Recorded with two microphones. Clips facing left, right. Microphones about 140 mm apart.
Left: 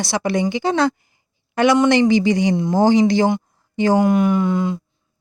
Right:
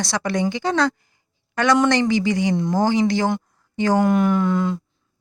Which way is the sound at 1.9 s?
20° left (ahead or behind).